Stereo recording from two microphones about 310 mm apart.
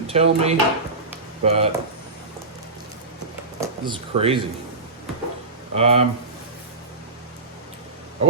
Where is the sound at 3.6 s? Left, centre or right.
Centre.